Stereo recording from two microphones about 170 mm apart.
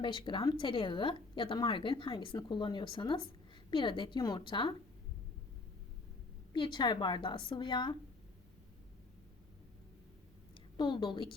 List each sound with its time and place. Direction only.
0.0 s a woman's voice: 30° left (ahead or behind)
6.5 s a woman's voice: 25° left (ahead or behind)
10.8 s a woman's voice: 25° left (ahead or behind)